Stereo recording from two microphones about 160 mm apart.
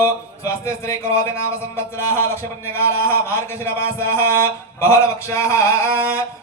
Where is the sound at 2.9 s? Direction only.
15° left (ahead or behind).